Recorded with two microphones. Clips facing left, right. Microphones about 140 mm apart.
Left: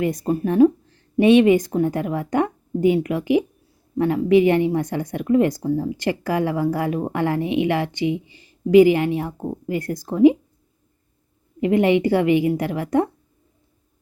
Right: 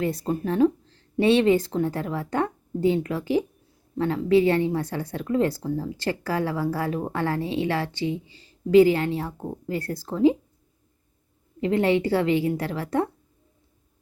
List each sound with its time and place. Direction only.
0.0 s speech: 15° left (ahead or behind)
11.6 s speech: 15° left (ahead or behind)